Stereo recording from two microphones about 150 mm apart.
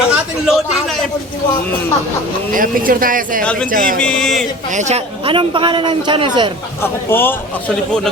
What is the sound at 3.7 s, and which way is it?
Speech, 65° right (ahead or behind).